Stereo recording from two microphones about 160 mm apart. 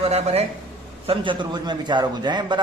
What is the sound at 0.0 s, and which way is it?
A man's voice, 40° right (ahead or behind).